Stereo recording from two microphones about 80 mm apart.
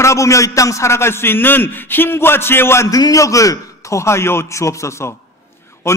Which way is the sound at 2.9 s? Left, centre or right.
Left.